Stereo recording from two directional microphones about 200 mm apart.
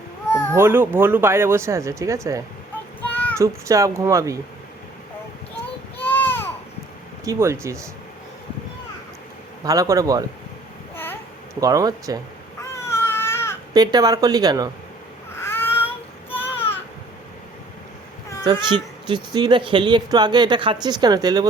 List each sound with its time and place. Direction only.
0.5 s speech: 10° right (ahead or behind)
3.0 s child singing: 5° left (ahead or behind)
3.3 s speech: 15° right (ahead or behind)
6.0 s baby cry: 10° left (ahead or behind)
7.3 s speech: 15° right (ahead or behind)
9.6 s speech: 15° right (ahead or behind)
10.9 s babbling: 10° left (ahead or behind)
11.6 s speech: 15° right (ahead or behind)
12.7 s baby cry: 15° left (ahead or behind)
13.7 s speech: 20° right (ahead or behind)
15.4 s a sound: 10° left (ahead or behind)
18.4 s speech: 25° right (ahead or behind)